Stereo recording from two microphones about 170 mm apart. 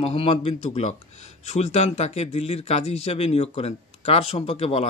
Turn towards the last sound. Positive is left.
turn(degrees=35)  # may be behind; listen again after turning